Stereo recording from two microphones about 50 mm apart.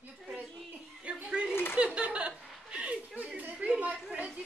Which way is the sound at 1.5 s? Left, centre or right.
Left.